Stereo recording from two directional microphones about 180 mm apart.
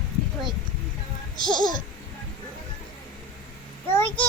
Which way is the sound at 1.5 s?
25° left (ahead or behind).